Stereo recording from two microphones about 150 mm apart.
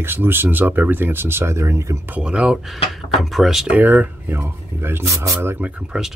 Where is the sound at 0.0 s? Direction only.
15° right (ahead or behind).